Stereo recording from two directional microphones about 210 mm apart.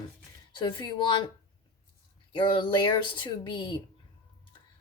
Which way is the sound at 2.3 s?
25° left (ahead or behind).